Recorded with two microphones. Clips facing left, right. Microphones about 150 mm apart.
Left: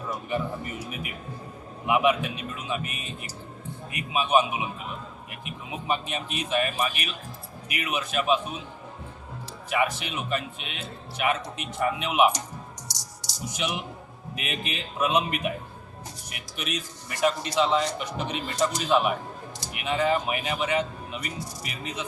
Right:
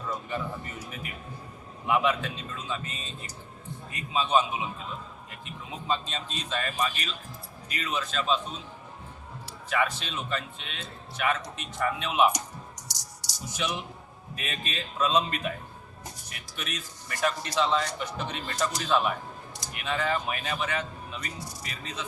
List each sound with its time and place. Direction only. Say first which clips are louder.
0.1 s a sound: left 4 dB; 15° left (ahead or behind)
1.9 s a man's voice: left 3 dB; 15° left (ahead or behind)
9.6 s a man's voice: left 2 dB; 15° left (ahead or behind)
13.5 s a man's voice: left 1 dB; 15° left (ahead or behind)